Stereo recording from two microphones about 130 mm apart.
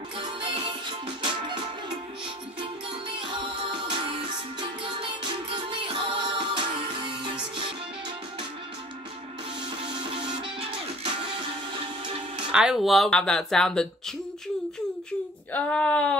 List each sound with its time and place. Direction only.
1.0 s music: 40° right (ahead or behind)
3.2 s music: 40° right (ahead or behind)
5.2 s music: 40° right (ahead or behind)
12.4 s speech: 5° right (ahead or behind)
15.5 s speech: 10° left (ahead or behind)